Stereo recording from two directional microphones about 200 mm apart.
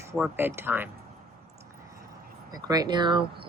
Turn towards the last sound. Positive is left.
turn(degrees=-25)  # may be behind; listen again after turning